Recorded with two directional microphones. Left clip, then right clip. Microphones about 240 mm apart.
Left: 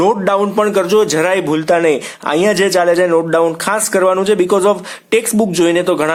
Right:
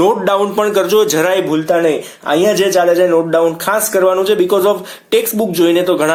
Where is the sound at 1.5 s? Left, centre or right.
Left.